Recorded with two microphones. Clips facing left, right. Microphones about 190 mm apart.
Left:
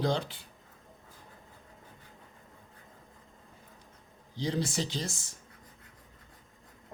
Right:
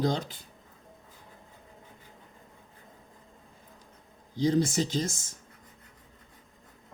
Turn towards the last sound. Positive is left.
turn(degrees=-45)  # may be behind; listen again after turning